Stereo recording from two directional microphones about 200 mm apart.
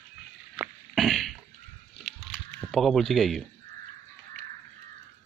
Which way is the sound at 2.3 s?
5° left (ahead or behind).